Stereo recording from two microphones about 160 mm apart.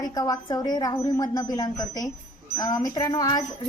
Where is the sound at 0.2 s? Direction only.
20° left (ahead or behind).